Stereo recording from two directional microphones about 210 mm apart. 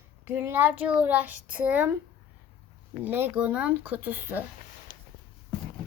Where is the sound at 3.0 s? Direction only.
10° right (ahead or behind).